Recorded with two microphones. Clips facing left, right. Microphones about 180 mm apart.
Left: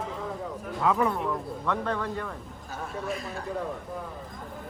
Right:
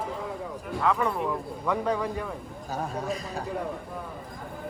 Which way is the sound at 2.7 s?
40° right (ahead or behind).